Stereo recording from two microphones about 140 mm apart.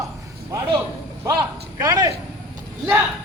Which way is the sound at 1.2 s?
30° right (ahead or behind).